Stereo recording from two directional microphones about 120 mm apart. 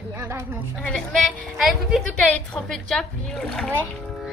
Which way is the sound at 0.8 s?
5° left (ahead or behind).